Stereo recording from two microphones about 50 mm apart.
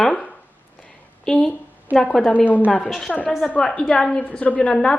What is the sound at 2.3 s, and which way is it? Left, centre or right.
Speech, left.